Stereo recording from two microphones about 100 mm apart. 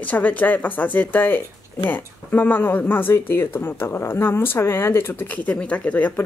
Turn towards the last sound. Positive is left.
turn(degrees=15)  # may be behind; listen again after turning